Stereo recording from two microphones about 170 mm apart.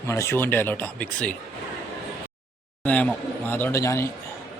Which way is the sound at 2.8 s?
10° left (ahead or behind).